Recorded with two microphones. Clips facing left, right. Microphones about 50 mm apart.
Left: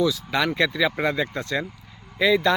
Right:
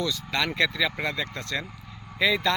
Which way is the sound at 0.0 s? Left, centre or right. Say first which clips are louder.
Left 5 dB; centre.